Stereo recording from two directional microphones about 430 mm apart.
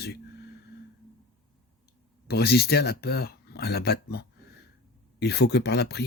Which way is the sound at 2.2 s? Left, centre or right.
Left.